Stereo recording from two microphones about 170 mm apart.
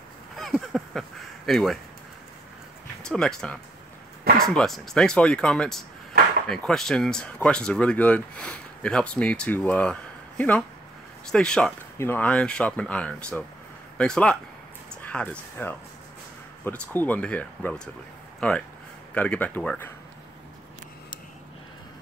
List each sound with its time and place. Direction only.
0.4 s speech: centre (ahead or behind)
3.0 s speech: 5° left (ahead or behind)
6.1 s a sound: 70° right (ahead or behind)
6.5 s speech: 5° left (ahead or behind)